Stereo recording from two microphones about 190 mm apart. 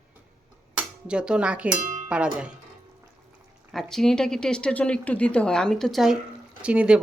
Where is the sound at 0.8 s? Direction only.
5° right (ahead or behind).